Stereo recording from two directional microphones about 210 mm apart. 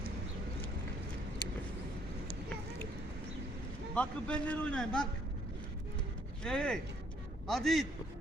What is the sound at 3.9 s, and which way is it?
A man's voice, 5° left (ahead or behind).